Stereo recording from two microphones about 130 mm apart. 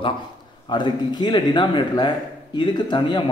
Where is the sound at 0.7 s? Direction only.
35° left (ahead or behind).